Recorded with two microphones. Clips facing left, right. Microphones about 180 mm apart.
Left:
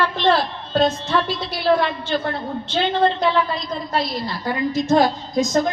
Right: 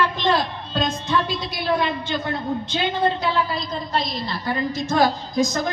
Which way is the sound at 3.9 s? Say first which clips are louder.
Left 3 dB; 5° left (ahead or behind).